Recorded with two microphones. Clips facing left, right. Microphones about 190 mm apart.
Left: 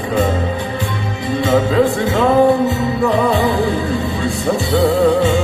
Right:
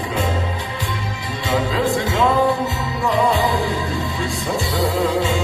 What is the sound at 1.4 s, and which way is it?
Music, 55° left (ahead or behind).